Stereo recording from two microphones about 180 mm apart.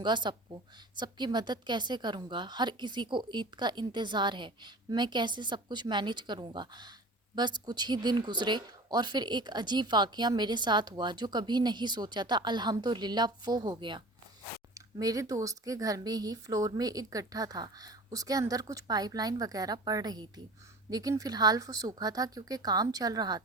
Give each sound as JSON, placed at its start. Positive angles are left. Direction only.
{"t": 0.0, "sound": "speech", "side_deg": -25}